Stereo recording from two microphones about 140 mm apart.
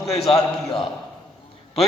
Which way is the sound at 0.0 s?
50° left (ahead or behind).